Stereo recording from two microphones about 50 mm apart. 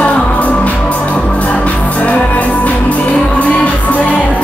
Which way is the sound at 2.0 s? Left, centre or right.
Left.